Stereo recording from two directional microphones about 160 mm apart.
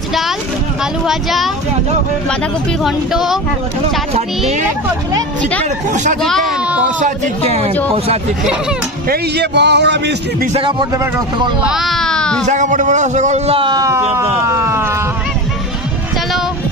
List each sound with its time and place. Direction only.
1.0 s speech: centre (ahead or behind)
2.8 s speech: centre (ahead or behind)
4.1 s a man's voice: 45° right (ahead or behind)
7.0 s a man's voice: 45° right (ahead or behind)
9.1 s a man's voice: 90° right
10.5 s speech: 30° right (ahead or behind)
11.7 s baby cry: centre (ahead or behind)
12.4 s a man's voice: 50° right (ahead or behind); by 14.9 s 15° right (ahead or behind)